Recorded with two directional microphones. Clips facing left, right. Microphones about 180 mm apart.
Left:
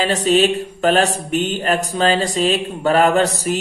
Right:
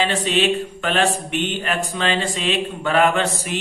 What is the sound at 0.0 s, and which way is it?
Mantra, 40° left (ahead or behind).